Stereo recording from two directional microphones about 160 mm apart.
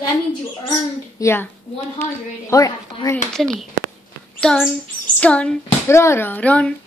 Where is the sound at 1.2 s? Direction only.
15° left (ahead or behind).